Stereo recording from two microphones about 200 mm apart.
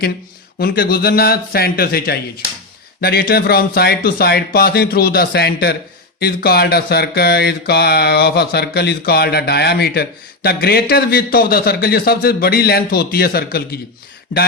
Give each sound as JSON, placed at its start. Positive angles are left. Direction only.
{"t": 0.6, "sound": "mantra", "side_deg": 50}